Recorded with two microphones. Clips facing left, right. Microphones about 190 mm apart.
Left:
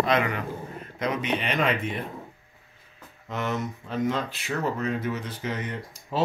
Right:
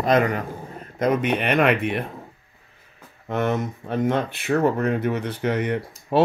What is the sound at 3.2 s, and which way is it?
Speech, 55° right (ahead or behind).